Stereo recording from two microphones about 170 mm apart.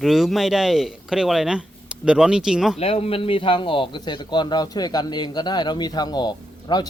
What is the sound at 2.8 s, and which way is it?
A man's voice, 35° left (ahead or behind).